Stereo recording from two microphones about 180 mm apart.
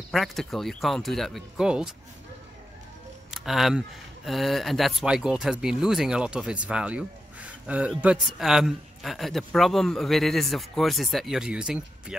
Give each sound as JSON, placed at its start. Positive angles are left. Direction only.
{"t": 0.1, "sound": "speech", "side_deg": 0}
{"t": 3.3, "sound": "speech", "side_deg": 0}